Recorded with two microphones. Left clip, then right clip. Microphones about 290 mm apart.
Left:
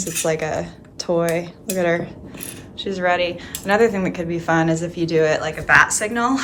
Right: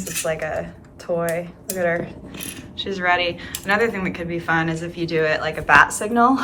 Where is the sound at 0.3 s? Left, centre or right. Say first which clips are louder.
Left 2 dB; left.